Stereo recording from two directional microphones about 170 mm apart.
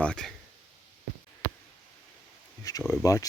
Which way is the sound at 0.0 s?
5° left (ahead or behind).